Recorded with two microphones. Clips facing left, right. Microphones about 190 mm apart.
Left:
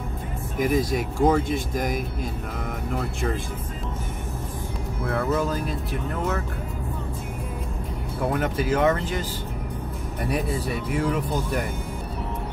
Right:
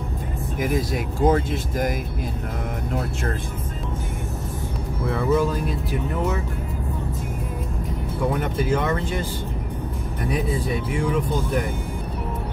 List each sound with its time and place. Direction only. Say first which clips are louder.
0.6 s speech: left 2 dB; centre (ahead or behind)
5.0 s speech: right 3 dB; centre (ahead or behind)
8.3 s speech: even; 5° left (ahead or behind)
10.7 s speech: even; 5° left (ahead or behind)